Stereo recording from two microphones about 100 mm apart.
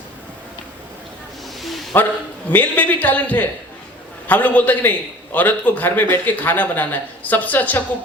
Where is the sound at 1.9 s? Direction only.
20° left (ahead or behind).